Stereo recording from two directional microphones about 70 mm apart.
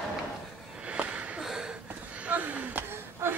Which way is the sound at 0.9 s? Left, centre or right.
Centre.